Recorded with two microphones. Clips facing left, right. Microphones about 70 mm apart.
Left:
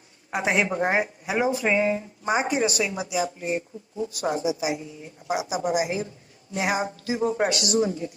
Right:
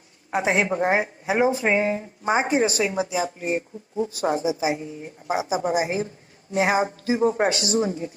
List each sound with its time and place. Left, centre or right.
0.3 s a woman's voice: right